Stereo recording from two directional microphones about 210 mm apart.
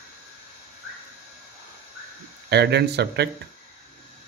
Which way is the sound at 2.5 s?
50° right (ahead or behind).